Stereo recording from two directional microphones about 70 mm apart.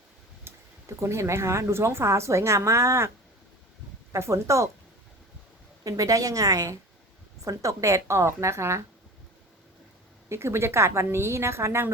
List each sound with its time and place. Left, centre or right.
0.4 s speech: right
4.1 s speech: right
5.8 s a woman's voice: right
10.2 s speech: right